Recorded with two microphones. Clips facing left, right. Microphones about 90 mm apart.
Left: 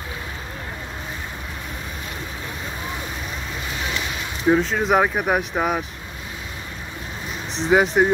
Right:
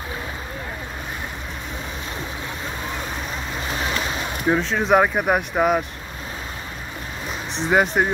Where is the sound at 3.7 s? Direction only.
35° right (ahead or behind).